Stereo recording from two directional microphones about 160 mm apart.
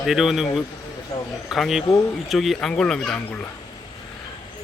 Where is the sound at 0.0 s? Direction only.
Centre (ahead or behind).